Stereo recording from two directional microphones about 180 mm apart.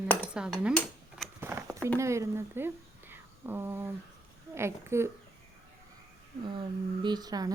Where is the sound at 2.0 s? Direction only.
15° right (ahead or behind).